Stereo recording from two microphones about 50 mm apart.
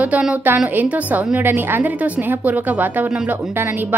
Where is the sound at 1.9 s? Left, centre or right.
Right.